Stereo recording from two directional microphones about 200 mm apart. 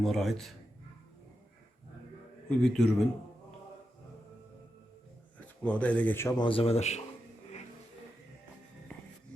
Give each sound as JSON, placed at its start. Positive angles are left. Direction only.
{"t": 0.0, "sound": "speech", "side_deg": 0}
{"t": 2.5, "sound": "speech", "side_deg": 5}
{"t": 5.6, "sound": "speech", "side_deg": 5}